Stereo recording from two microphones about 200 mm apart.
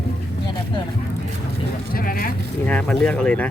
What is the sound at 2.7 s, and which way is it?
Speech, 5° left (ahead or behind).